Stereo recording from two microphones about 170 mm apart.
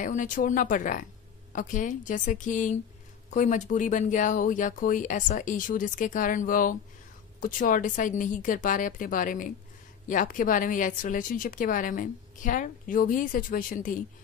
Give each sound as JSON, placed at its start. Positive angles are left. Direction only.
{"t": 0.0, "sound": "speech", "side_deg": 50}